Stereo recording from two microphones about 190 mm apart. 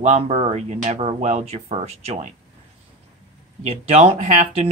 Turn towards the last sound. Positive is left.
turn(degrees=-35)  # may be behind; listen again after turning